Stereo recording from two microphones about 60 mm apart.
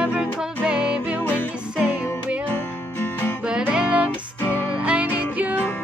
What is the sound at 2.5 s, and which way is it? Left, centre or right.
Music, left.